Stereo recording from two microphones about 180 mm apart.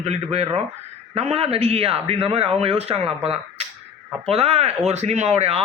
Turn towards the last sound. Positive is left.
turn(degrees=-35)  # may be behind; listen again after turning